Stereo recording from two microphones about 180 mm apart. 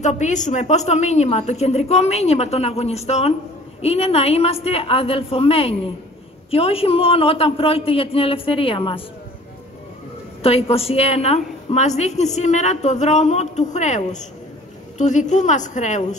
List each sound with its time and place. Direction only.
0.0 s a woman's voice: 40° left (ahead or behind)
10.4 s a woman's voice: 35° left (ahead or behind)